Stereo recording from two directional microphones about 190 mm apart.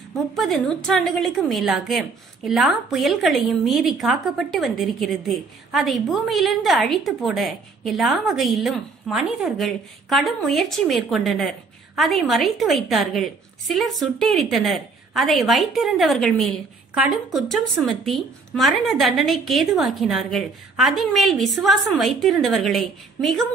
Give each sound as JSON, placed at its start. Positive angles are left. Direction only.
{"t": 0.1, "sound": "a woman's voice", "side_deg": 0}